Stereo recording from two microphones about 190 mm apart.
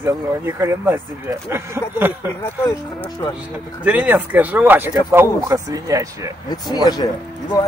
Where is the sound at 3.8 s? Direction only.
10° right (ahead or behind).